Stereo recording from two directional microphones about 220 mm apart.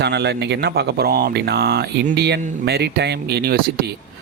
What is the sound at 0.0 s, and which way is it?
Speech, 50° right (ahead or behind).